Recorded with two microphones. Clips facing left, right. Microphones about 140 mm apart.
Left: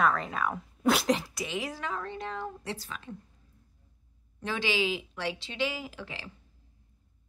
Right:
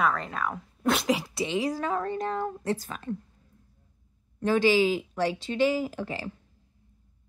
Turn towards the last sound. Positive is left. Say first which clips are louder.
# right 9 dB
turn(degrees=-45)  # may be behind; listen again after turning